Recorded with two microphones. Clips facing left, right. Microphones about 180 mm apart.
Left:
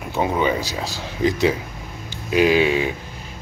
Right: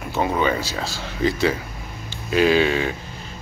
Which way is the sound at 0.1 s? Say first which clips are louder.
Left 1 dB; 15° left (ahead or behind).